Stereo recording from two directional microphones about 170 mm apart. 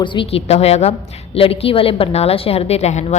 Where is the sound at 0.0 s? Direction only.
30° left (ahead or behind).